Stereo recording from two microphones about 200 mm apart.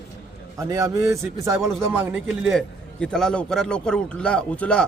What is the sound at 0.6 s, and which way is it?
A man's voice, 15° right (ahead or behind).